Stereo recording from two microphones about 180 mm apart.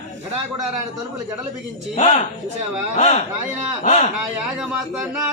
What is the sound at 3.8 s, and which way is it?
Speech, 45° left (ahead or behind).